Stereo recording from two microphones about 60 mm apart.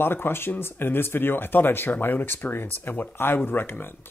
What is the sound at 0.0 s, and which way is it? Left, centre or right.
Speech, left.